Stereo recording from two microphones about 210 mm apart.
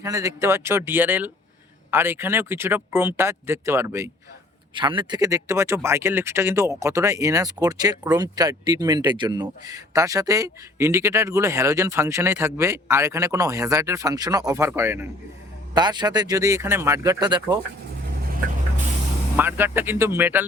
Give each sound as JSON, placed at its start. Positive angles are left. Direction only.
{"t": 0.0, "sound": "speech", "side_deg": -15}
{"t": 4.7, "sound": "speech", "side_deg": -25}
{"t": 19.4, "sound": "speech", "side_deg": -10}